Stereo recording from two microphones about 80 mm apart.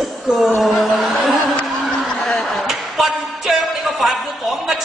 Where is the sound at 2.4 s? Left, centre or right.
Centre.